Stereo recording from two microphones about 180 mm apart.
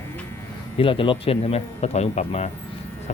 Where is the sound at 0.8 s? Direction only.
30° left (ahead or behind).